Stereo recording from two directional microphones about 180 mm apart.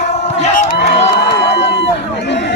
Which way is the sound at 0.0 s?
40° left (ahead or behind).